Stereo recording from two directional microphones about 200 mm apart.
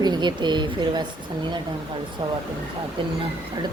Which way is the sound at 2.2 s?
20° right (ahead or behind).